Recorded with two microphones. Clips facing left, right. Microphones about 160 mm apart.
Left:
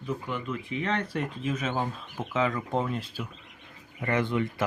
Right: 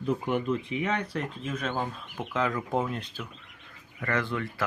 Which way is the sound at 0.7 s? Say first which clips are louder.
Even; 10° right (ahead or behind).